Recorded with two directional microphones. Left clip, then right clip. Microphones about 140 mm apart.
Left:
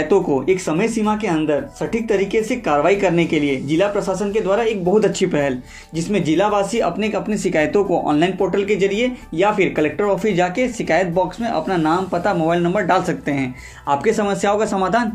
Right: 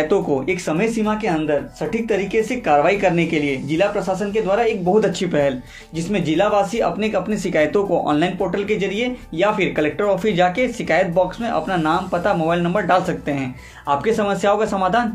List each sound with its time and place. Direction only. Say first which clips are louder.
0.1 s speech: left 3 dB; 25° left (ahead or behind)